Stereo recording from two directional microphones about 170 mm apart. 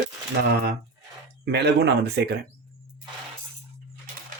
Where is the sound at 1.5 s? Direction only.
80° right.